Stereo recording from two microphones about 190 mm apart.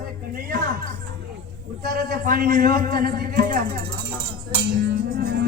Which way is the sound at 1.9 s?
50° right (ahead or behind).